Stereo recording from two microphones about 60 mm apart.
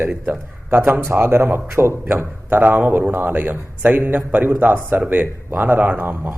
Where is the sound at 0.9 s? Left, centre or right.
Right.